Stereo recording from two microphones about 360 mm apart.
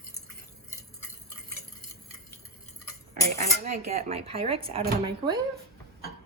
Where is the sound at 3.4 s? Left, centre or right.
Centre.